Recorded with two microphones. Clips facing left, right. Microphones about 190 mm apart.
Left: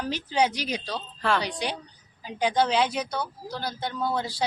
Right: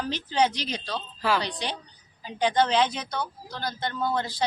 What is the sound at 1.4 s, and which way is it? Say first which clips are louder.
Speech: left 2 dB; 10° left (ahead or behind).